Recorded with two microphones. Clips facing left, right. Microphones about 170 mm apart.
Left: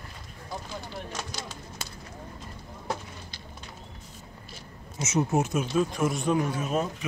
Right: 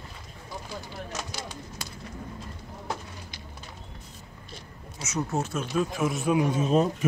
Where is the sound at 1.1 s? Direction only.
5° right (ahead or behind).